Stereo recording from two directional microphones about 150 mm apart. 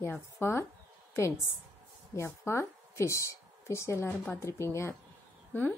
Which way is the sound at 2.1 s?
20° left (ahead or behind).